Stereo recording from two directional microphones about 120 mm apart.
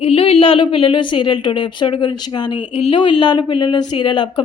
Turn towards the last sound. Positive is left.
turn(degrees=40)  # may be behind; listen again after turning